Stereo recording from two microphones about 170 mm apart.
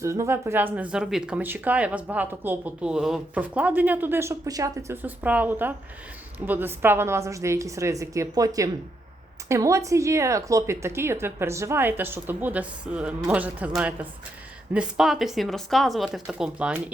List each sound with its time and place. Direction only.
0.0 s speech: 15° right (ahead or behind)